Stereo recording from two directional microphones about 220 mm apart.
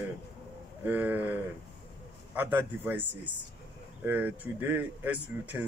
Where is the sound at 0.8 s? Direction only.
10° right (ahead or behind).